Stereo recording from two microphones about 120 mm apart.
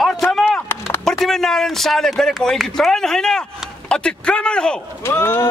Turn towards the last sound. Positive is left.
turn(degrees=20)  # may be behind; listen again after turning